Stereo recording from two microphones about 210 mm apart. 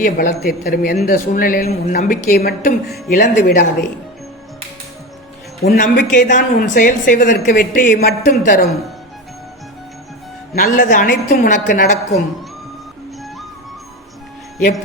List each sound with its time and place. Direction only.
0.0 s a woman's voice: 45° left (ahead or behind)
5.6 s a woman's voice: 45° left (ahead or behind)
10.5 s a woman's voice: 40° left (ahead or behind)